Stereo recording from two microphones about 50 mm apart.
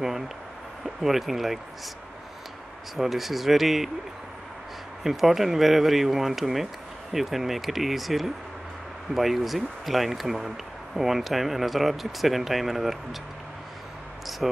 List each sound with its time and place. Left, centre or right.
0.8 s speech: centre
3.0 s speech: centre
5.0 s speech: centre